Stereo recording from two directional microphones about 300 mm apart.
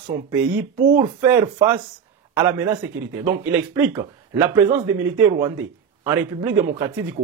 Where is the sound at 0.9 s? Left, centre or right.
Centre.